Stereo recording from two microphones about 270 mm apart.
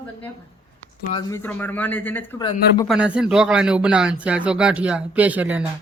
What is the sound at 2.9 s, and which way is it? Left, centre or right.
A man's voice, centre.